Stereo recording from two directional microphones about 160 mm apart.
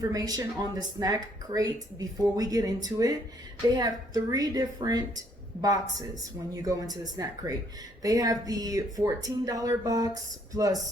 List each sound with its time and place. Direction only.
0.0 s a woman's voice: 20° right (ahead or behind)